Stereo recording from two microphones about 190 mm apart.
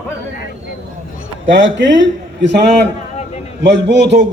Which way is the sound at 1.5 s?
80° right.